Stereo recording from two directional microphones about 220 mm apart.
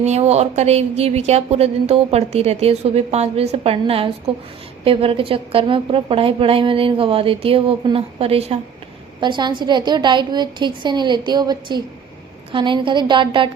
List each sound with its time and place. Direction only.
0.0 s a woman's voice: 30° right (ahead or behind)